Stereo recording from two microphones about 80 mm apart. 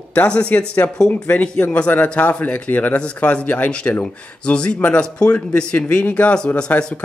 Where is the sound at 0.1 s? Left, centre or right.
Centre.